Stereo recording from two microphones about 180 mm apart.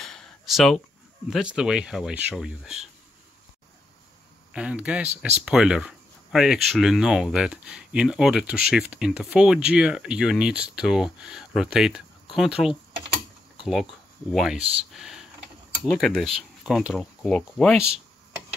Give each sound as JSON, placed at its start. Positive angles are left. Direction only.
{"t": 0.0, "sound": "a sound", "side_deg": 5}
{"t": 1.3, "sound": "speech", "side_deg": -5}
{"t": 4.6, "sound": "speech", "side_deg": -5}
{"t": 13.6, "sound": "a sound", "side_deg": 0}
{"t": 14.3, "sound": "speech", "side_deg": 0}
{"t": 14.6, "sound": "speech", "side_deg": -35}
{"t": 14.9, "sound": "speech", "side_deg": 0}